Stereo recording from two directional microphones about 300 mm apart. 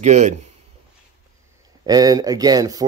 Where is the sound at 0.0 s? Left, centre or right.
Right.